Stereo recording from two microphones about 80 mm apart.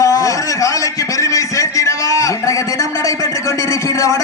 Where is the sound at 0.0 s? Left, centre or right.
Left.